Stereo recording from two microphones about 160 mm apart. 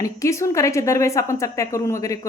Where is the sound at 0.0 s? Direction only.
20° left (ahead or behind).